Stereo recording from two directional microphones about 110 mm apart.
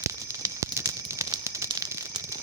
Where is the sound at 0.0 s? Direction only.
30° right (ahead or behind).